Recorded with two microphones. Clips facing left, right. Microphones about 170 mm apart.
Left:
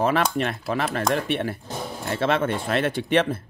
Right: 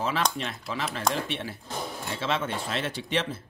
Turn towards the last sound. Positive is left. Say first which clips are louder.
# left 8 dB
turn(degrees=55)  # may be behind; listen again after turning